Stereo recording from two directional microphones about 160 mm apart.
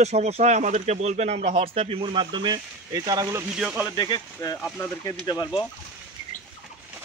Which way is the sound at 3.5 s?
5° right (ahead or behind).